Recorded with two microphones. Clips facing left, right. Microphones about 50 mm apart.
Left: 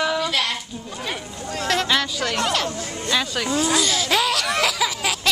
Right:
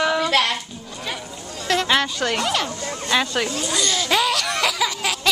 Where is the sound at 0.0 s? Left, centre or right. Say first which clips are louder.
Right 2 dB; centre.